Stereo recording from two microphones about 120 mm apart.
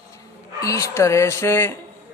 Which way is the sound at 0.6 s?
25° left (ahead or behind).